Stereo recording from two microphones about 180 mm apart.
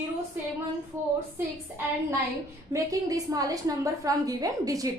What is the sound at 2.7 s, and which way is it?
A woman's voice, 20° right (ahead or behind).